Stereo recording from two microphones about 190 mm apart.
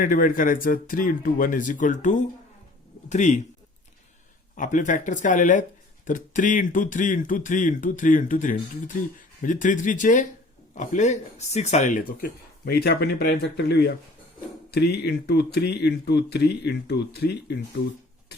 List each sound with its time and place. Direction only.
0.0 s speech: 45° left (ahead or behind)
4.5 s speech: 40° left (ahead or behind); by 17.6 s 60° left (ahead or behind)
18.3 s a sound: 60° left (ahead or behind)